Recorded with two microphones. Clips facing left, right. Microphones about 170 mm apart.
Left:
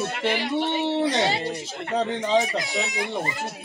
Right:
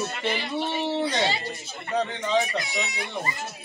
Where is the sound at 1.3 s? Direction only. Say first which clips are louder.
Left 4 dB; 70° left (ahead or behind).